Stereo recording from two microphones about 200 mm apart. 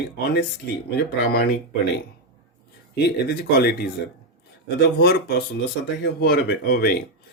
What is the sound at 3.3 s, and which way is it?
Speech, 50° left (ahead or behind).